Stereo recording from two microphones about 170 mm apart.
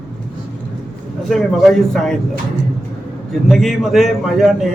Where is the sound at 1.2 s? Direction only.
Centre (ahead or behind).